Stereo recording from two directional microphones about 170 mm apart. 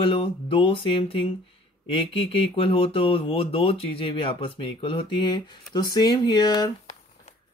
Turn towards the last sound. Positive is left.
turn(degrees=25)  # may be behind; listen again after turning